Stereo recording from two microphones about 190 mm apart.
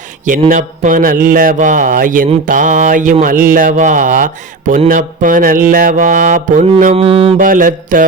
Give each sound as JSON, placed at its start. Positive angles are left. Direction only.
{"t": 0.3, "sound": "a man's voice", "side_deg": -40}
{"t": 7.0, "sound": "mantra", "side_deg": -30}
{"t": 7.3, "sound": "a man's voice", "side_deg": -45}